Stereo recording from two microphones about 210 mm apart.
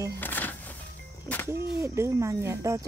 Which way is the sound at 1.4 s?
15° right (ahead or behind).